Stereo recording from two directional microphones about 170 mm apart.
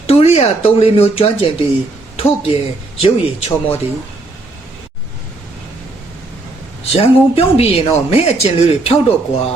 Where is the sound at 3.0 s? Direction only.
35° left (ahead or behind).